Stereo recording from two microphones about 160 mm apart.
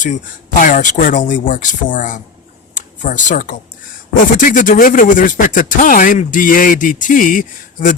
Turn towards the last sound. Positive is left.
turn(degrees=55)  # may be behind; listen again after turning